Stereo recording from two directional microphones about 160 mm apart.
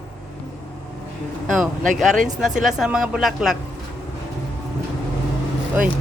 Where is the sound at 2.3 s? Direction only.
5° right (ahead or behind).